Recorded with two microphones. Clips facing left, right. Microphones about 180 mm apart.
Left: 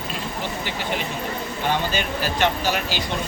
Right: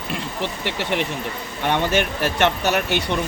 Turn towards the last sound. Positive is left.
turn(degrees=-65)  # may be behind; listen again after turning